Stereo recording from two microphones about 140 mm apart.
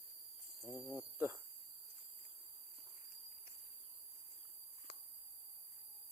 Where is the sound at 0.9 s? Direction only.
20° right (ahead or behind).